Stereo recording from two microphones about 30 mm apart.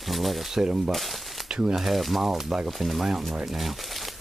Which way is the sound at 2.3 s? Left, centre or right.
Centre.